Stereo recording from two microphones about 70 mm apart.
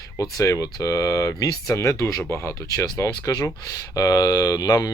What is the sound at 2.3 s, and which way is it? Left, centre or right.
Speech, left.